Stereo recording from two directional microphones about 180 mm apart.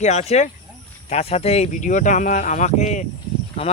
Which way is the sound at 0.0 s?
40° left (ahead or behind).